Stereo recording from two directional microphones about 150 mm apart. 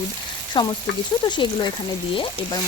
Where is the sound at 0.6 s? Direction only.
30° left (ahead or behind).